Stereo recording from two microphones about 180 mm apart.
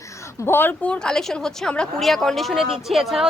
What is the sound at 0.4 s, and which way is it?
Speech, 10° left (ahead or behind).